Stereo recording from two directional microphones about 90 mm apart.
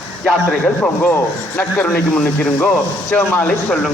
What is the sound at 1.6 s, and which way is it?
Speech, 20° left (ahead or behind).